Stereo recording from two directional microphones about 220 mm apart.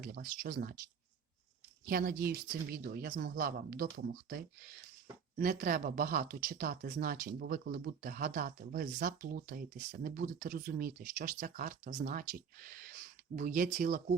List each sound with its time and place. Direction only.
0.0 s speech: 40° right (ahead or behind)
1.8 s speech: 40° right (ahead or behind)